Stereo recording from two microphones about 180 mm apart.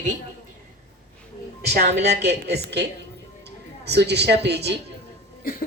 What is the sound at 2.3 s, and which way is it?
A woman's voice, 65° right (ahead or behind).